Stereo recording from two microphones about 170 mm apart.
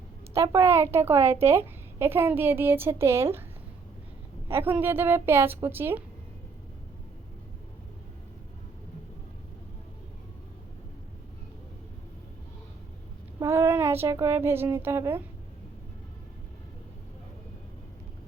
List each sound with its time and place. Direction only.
0.3 s a woman's voice: 15° right (ahead or behind)
4.4 s a woman's voice: 10° right (ahead or behind)
13.4 s speech: 15° right (ahead or behind)